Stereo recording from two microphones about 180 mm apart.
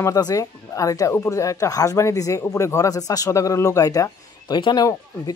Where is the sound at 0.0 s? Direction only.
20° left (ahead or behind).